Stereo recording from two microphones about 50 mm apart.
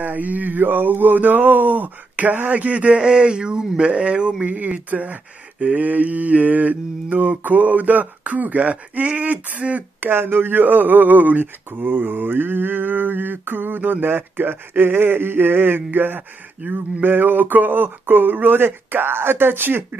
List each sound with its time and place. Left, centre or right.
0.0 s speech: right
9.9 s speech: right